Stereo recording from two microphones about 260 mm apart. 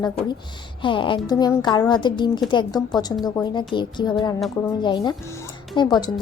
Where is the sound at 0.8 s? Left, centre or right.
Centre.